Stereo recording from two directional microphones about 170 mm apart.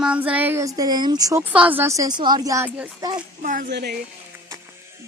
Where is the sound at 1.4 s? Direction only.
10° right (ahead or behind).